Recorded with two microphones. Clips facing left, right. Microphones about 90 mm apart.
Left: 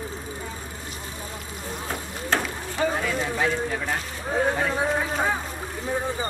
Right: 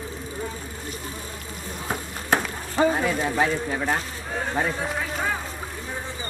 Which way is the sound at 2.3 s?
15° right (ahead or behind).